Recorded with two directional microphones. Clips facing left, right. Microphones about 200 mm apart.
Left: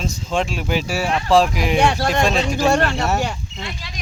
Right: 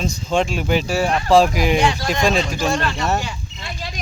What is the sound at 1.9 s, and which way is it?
Speech, 60° left (ahead or behind).